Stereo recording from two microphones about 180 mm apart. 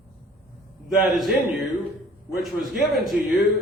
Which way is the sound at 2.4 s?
Centre (ahead or behind).